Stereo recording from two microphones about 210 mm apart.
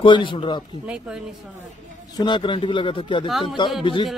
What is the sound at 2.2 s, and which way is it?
Speech, 20° left (ahead or behind).